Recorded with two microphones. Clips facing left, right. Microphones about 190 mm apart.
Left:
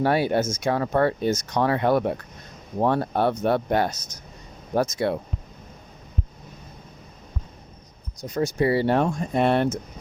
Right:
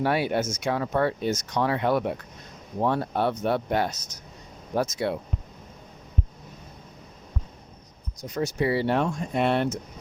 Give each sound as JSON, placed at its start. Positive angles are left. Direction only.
{"t": 0.0, "sound": "speech", "side_deg": 40}
{"t": 8.3, "sound": "speech", "side_deg": 45}